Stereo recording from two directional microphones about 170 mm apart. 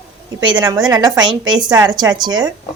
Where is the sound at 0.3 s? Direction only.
25° right (ahead or behind).